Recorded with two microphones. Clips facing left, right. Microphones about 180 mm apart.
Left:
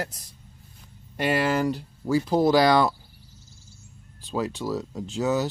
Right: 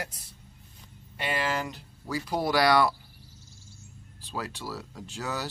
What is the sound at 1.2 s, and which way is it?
Speech, 45° left (ahead or behind).